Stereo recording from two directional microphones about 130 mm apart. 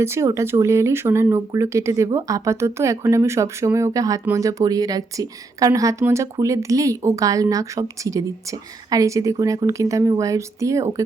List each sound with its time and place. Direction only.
0.0 s speech: 20° right (ahead or behind)